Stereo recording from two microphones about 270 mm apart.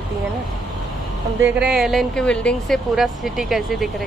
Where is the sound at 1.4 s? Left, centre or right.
Centre.